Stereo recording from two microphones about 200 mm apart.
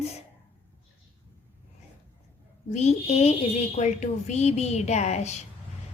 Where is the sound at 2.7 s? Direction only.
35° left (ahead or behind).